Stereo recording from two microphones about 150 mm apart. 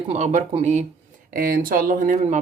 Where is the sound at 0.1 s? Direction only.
55° right (ahead or behind).